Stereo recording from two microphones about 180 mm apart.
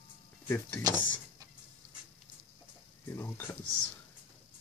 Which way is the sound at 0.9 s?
20° right (ahead or behind).